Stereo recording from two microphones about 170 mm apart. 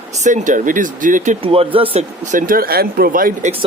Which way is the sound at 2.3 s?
55° right (ahead or behind).